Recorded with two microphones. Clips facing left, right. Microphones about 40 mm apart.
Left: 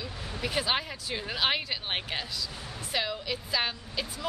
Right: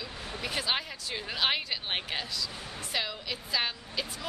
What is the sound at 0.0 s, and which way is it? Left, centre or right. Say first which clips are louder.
Speech: left 2 dB; centre.